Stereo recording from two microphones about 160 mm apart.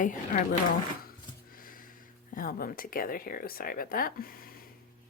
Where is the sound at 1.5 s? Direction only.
60° left (ahead or behind).